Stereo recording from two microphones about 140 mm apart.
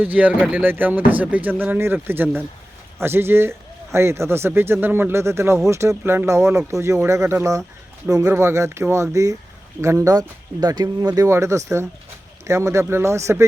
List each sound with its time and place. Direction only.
0.0 s speech: 10° right (ahead or behind)